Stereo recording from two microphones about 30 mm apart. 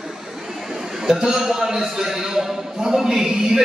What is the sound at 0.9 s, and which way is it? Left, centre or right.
A man's voice, centre.